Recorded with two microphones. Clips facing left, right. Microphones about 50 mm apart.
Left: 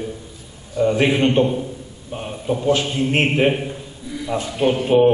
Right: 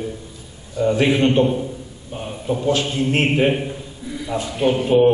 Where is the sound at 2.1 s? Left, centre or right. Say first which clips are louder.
Left 1 dB; centre.